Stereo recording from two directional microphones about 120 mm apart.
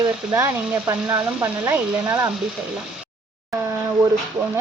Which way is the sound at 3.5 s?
25° right (ahead or behind).